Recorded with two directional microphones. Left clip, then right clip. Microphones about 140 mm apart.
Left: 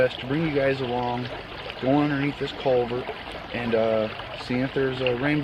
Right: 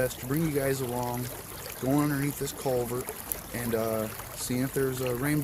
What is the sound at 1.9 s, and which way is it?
Speech, 25° right (ahead or behind).